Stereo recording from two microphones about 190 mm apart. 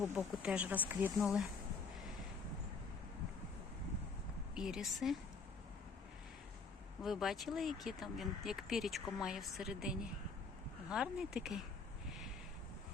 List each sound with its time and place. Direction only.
0.4 s speech: 5° right (ahead or behind)
4.5 s speech: 5° right (ahead or behind)
7.0 s speech: centre (ahead or behind)